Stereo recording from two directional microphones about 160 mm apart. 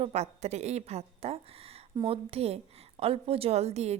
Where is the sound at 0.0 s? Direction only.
40° right (ahead or behind).